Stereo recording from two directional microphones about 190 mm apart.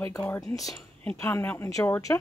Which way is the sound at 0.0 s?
10° left (ahead or behind).